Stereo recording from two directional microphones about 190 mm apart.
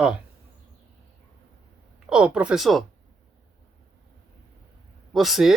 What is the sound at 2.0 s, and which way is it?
Speech, 5° right (ahead or behind).